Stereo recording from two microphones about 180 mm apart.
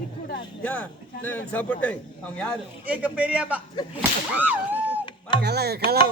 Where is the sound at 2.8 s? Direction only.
10° right (ahead or behind).